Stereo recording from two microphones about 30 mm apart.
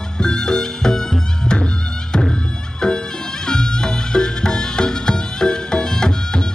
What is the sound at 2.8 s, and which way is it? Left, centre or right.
Music, left.